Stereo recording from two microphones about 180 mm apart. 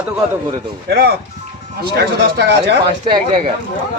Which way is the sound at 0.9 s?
65° right (ahead or behind).